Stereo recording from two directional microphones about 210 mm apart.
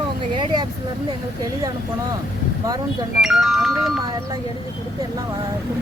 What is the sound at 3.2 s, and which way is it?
Speech, centre (ahead or behind).